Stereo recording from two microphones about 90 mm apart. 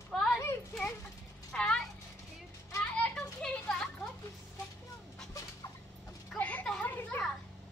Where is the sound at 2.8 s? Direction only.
10° left (ahead or behind).